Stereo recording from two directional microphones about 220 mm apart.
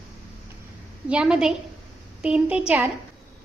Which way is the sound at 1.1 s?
5° right (ahead or behind).